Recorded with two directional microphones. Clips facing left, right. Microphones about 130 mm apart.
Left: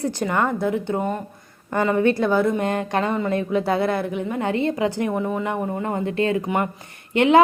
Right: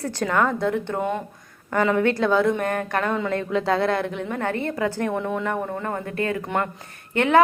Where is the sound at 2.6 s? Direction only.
20° left (ahead or behind).